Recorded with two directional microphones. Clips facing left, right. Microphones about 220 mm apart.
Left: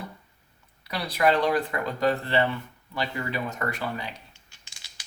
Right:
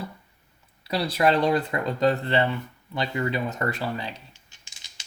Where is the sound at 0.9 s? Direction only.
30° right (ahead or behind).